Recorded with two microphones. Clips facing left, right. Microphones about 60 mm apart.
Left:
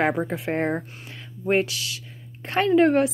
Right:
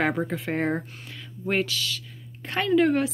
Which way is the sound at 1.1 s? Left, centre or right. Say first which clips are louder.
Left 6 dB; left.